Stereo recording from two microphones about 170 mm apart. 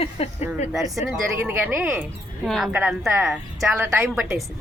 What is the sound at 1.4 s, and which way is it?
Speech, 10° right (ahead or behind).